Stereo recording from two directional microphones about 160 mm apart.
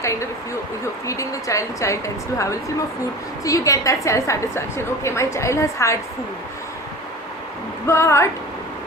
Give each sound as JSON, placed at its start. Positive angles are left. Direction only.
{"t": 0.0, "sound": "a woman's voice", "side_deg": 20}
{"t": 7.9, "sound": "speech", "side_deg": 15}